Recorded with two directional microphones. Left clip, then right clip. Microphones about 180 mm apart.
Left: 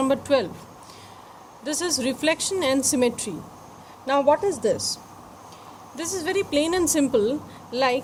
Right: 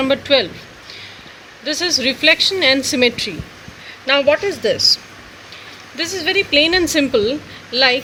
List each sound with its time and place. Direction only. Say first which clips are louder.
0.0 s a woman's voice: right 6 dB; 50° left (ahead or behind)
1.6 s a woman's voice: right 8 dB; 55° left (ahead or behind)
4.0 s speech: right 5 dB; 40° left (ahead or behind)
4.6 s a woman's voice: right 9 dB; 55° left (ahead or behind)
6.0 s a woman's voice: right 8 dB; 55° left (ahead or behind)